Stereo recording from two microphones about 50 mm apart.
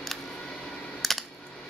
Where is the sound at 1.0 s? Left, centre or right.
Centre.